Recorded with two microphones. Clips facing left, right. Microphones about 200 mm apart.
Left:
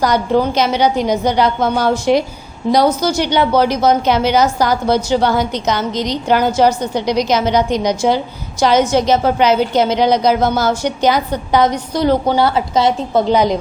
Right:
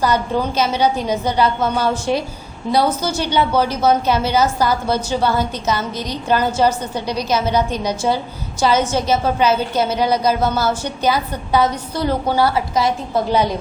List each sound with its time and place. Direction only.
0.0 s a woman's voice: 15° left (ahead or behind)